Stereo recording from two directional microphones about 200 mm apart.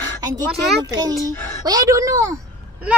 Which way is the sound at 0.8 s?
20° right (ahead or behind).